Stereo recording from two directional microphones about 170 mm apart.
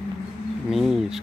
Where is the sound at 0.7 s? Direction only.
Centre (ahead or behind).